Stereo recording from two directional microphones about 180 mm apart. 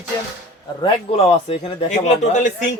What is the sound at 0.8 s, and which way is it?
Speech, 35° left (ahead or behind).